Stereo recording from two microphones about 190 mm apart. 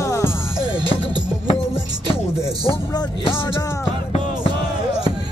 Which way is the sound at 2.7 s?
25° left (ahead or behind).